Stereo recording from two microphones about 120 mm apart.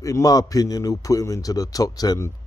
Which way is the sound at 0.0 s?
30° left (ahead or behind).